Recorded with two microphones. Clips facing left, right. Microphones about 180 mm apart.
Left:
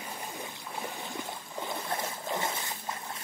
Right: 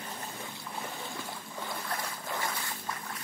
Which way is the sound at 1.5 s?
20° left (ahead or behind).